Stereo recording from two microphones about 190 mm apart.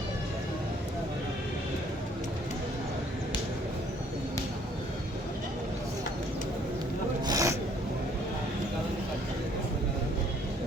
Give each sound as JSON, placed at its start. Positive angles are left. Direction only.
{"t": 7.3, "sound": "sneeze", "side_deg": -20}